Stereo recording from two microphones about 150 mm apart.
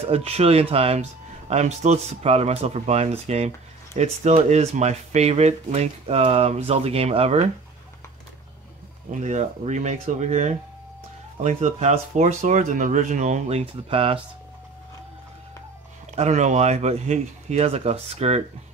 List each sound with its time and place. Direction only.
0.0 s speech: 40° right (ahead or behind)
9.1 s speech: 50° right (ahead or behind)
16.1 s speech: 50° right (ahead or behind)